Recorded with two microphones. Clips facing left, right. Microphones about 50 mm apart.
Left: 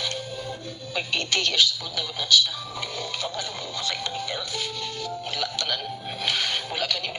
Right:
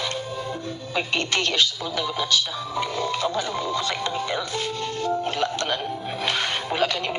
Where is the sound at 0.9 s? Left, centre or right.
Right.